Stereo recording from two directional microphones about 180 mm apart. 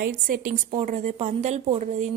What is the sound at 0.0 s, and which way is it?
A woman's voice, 50° right (ahead or behind).